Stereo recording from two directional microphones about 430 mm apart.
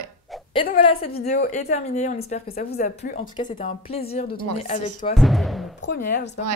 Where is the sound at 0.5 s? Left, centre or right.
Centre.